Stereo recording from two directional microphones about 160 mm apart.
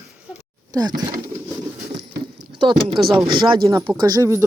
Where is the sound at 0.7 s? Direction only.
25° right (ahead or behind).